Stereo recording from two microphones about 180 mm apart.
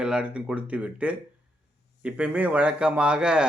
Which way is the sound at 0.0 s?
5° right (ahead or behind).